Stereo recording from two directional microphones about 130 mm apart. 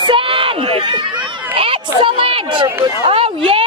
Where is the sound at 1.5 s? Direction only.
45° right (ahead or behind).